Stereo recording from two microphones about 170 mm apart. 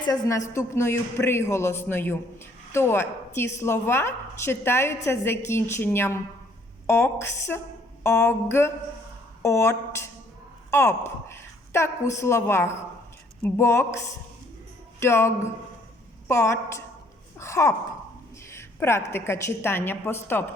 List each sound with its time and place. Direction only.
0.1 s a woman's voice: 20° left (ahead or behind)
15.0 s a woman's voice: 15° left (ahead or behind)
17.4 s a sound: 15° left (ahead or behind)
18.5 s a woman's voice: 15° left (ahead or behind)